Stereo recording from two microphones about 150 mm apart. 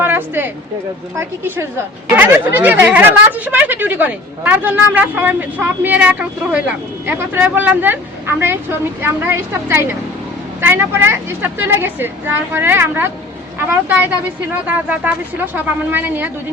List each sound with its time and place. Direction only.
0.0 s a sound: 15° right (ahead or behind)
1.1 s a woman's voice: 15° right (ahead or behind)
9.0 s a woman's voice: 15° right (ahead or behind)